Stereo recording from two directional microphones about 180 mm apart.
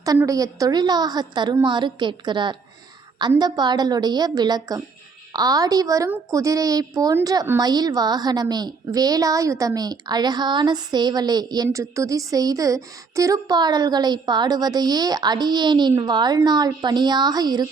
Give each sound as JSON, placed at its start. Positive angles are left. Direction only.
{"t": 0.0, "sound": "a woman's voice", "side_deg": -20}